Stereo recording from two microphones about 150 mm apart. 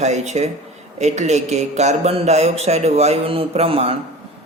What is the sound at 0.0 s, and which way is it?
Speech, 45° right (ahead or behind).